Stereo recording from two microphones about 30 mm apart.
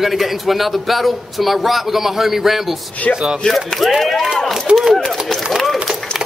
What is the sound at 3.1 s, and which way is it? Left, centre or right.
Speech, right.